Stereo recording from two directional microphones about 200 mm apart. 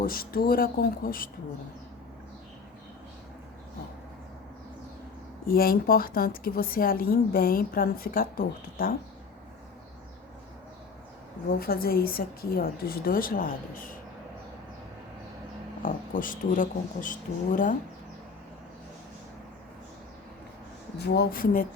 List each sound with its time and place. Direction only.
0.0 s a woman's voice: 45° left (ahead or behind)
5.5 s a woman's voice: 50° left (ahead or behind)
11.4 s a woman's voice: 50° left (ahead or behind)
15.8 s speech: 40° left (ahead or behind)
21.0 s a woman's voice: 55° left (ahead or behind)